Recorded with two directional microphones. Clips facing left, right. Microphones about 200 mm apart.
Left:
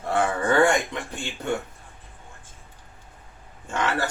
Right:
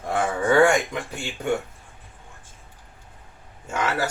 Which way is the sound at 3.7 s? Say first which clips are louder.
Right 1 dB; 10° right (ahead or behind).